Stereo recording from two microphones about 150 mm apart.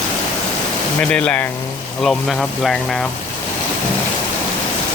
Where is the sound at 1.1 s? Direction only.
5° left (ahead or behind).